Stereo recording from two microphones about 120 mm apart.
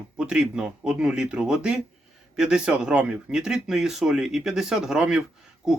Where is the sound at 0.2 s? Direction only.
5° right (ahead or behind).